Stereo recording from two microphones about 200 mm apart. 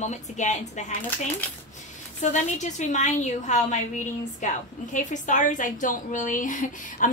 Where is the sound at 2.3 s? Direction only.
35° left (ahead or behind).